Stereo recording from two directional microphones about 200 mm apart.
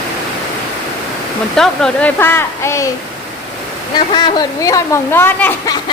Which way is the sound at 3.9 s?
20° left (ahead or behind).